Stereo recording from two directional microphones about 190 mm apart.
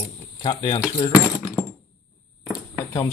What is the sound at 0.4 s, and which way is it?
Speech, 25° left (ahead or behind).